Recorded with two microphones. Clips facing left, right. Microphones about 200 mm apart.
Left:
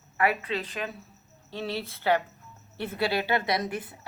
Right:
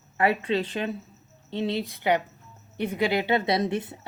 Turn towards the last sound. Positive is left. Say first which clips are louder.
# right 4 dB
turn(degrees=-25)  # may be behind; listen again after turning